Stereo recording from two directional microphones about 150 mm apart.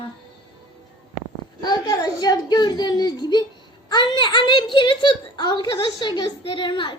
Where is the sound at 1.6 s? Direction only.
25° left (ahead or behind).